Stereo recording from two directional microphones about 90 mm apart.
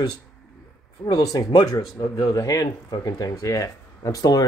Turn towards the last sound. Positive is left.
turn(degrees=45)  # may be behind; listen again after turning